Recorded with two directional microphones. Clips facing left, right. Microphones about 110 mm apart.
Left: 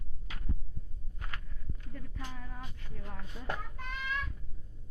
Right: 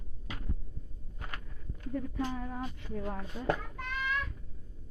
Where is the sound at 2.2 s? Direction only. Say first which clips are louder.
Right 9 dB; 35° right (ahead or behind).